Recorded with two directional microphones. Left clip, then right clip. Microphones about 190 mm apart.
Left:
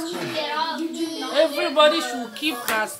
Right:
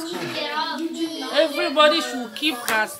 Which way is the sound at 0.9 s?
30° left (ahead or behind).